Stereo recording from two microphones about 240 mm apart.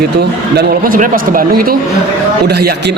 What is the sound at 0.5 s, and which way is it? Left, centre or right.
A man's voice, right.